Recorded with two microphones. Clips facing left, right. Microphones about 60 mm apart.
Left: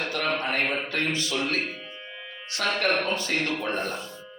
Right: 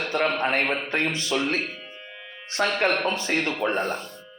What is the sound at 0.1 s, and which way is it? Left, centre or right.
Speech, right.